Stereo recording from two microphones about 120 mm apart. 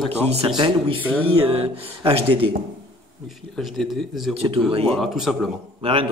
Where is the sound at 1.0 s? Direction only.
15° right (ahead or behind).